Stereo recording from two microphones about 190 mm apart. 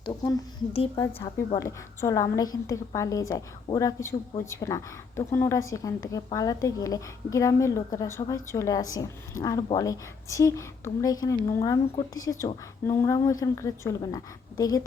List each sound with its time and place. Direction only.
0.0 s a woman's voice: 25° left (ahead or behind)